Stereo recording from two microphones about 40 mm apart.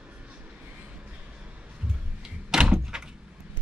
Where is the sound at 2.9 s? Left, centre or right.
Centre.